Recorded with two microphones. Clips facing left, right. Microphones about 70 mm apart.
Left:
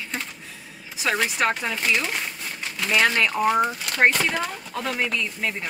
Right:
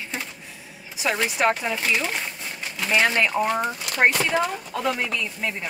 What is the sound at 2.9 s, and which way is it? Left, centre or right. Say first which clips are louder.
Speech: even; centre.